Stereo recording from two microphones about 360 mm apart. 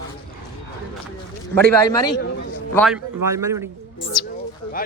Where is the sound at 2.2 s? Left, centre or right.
Left.